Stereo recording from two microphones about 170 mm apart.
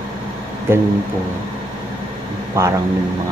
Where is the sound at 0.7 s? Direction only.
15° right (ahead or behind).